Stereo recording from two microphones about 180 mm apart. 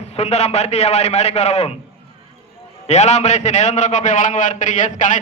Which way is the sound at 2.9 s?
40° left (ahead or behind).